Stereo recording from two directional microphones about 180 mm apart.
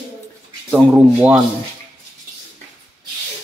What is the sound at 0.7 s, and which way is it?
Speech, 10° right (ahead or behind).